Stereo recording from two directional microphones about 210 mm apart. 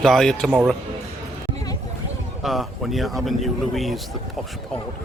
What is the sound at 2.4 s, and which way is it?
Speech, centre (ahead or behind).